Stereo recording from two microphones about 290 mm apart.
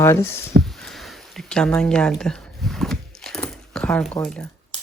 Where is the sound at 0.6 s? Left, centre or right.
Centre.